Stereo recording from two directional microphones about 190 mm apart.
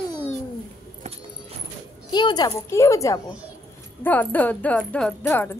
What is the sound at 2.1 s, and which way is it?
A woman's voice, 20° left (ahead or behind).